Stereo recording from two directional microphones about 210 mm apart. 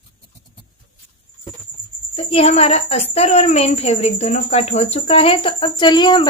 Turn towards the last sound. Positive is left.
turn(degrees=20)  # may be behind; listen again after turning